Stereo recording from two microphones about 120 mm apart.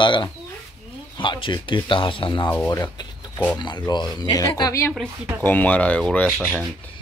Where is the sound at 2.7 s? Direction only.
30° left (ahead or behind).